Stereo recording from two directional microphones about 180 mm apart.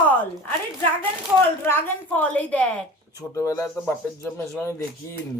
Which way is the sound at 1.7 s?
10° left (ahead or behind).